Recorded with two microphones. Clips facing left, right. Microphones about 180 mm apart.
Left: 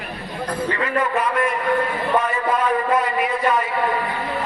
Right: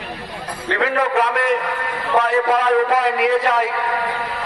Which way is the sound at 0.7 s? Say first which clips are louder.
Right 6 dB; 80° right.